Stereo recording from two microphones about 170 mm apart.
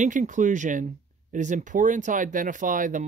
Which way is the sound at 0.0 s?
45° right (ahead or behind).